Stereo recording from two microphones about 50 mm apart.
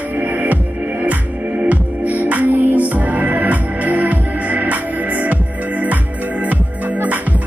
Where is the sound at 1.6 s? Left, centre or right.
Right.